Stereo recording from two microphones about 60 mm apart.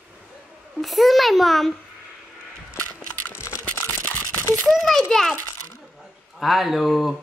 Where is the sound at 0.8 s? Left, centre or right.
Centre.